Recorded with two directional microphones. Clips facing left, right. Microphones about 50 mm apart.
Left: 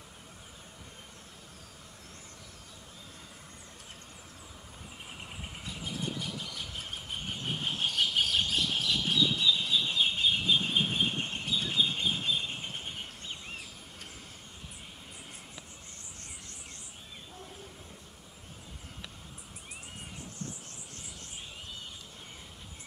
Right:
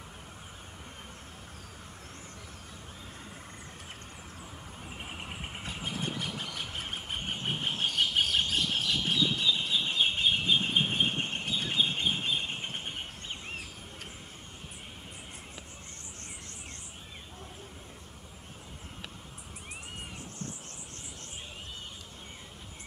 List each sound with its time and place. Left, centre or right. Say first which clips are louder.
4.8 s squeal: right 4 dB; right